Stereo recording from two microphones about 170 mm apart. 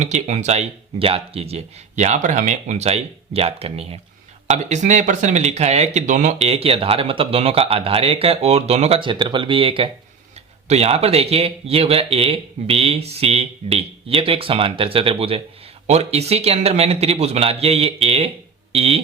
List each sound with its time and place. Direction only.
0.0 s speech: 45° right (ahead or behind)